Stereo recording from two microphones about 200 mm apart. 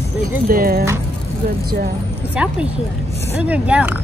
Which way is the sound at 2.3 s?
5° right (ahead or behind).